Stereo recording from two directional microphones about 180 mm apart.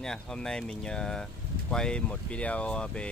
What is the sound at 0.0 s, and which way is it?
Speech, 5° left (ahead or behind).